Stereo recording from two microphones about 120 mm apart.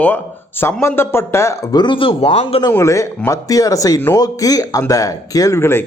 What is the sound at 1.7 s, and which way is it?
Speech, 40° left (ahead or behind).